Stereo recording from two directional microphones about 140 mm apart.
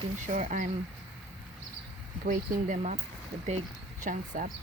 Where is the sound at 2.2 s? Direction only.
70° right (ahead or behind).